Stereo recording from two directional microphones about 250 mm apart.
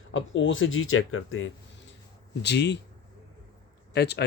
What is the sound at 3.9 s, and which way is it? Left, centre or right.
Speech, left.